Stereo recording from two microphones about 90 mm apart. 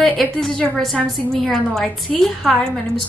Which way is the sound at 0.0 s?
5° left (ahead or behind).